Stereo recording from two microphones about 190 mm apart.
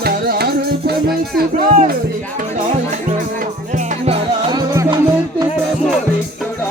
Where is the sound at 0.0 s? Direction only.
55° right (ahead or behind).